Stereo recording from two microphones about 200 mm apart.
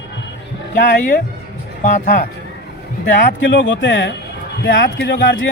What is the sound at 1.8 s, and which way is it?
Speech, 45° left (ahead or behind).